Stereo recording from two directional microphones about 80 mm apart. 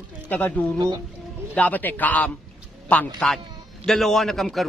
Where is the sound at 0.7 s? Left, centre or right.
Right.